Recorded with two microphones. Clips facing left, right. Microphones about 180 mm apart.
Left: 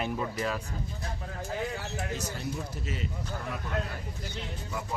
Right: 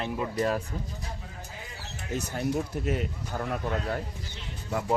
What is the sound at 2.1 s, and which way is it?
Speech, 60° right (ahead or behind).